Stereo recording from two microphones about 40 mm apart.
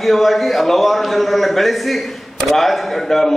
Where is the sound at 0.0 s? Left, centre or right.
Centre.